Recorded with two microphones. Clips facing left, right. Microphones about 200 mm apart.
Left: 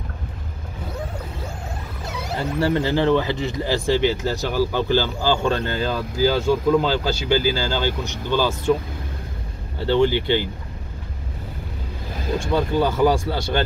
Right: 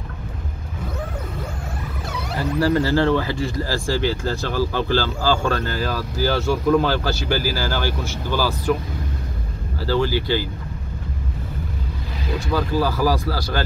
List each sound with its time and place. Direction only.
2.3 s speech: 25° left (ahead or behind)
9.8 s speech: 25° left (ahead or behind)
12.4 s speech: 25° left (ahead or behind)